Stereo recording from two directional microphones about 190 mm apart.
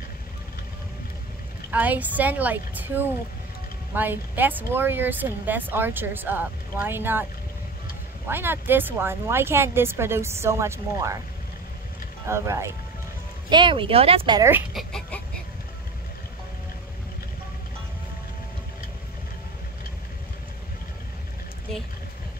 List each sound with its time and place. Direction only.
1.7 s speech: 10° right (ahead or behind)
3.9 s speech: 10° right (ahead or behind)
8.3 s speech: 10° right (ahead or behind)
12.3 s speech: 15° right (ahead or behind)
13.5 s speech: 25° right (ahead or behind)
14.7 s chicken: centre (ahead or behind)